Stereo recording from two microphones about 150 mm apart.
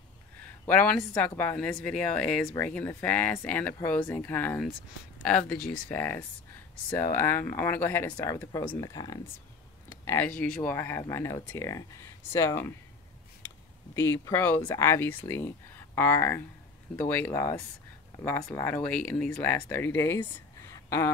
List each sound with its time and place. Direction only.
0.7 s speech: 10° left (ahead or behind)
8.8 s speech: 25° left (ahead or behind)
9.8 s a sound: 15° left (ahead or behind)
10.6 s speech: 15° left (ahead or behind)
13.9 s speech: 20° left (ahead or behind)